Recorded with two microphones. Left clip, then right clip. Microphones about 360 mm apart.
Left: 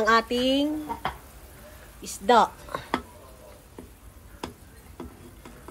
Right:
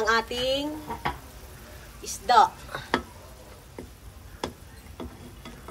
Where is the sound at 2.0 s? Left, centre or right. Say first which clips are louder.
Right 1 dB; centre.